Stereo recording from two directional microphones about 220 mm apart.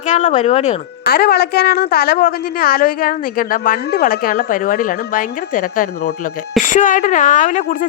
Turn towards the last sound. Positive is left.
turn(degrees=35)  # may be behind; listen again after turning